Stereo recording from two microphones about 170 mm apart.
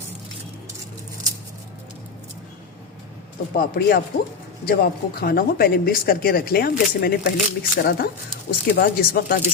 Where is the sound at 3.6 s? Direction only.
65° left (ahead or behind).